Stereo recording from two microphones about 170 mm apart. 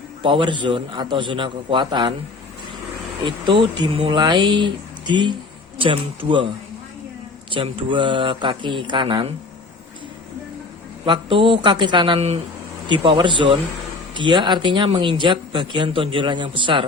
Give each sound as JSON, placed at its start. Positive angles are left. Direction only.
{"t": 0.2, "sound": "a man's voice", "side_deg": -30}
{"t": 3.2, "sound": "a man's voice", "side_deg": -30}
{"t": 7.5, "sound": "a man's voice", "side_deg": -30}
{"t": 11.0, "sound": "a man's voice", "side_deg": -30}